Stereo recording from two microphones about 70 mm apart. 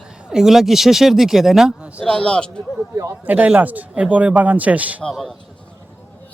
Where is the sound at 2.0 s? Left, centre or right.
Centre.